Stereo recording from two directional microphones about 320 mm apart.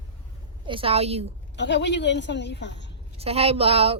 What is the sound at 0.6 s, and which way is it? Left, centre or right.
Speech, centre.